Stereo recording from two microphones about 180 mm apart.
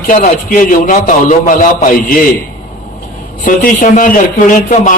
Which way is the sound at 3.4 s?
45° left (ahead or behind).